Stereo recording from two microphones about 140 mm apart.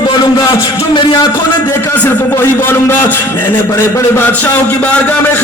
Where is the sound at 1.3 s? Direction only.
20° left (ahead or behind).